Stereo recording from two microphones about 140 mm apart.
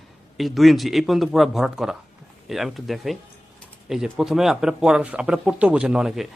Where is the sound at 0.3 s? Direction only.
Centre (ahead or behind).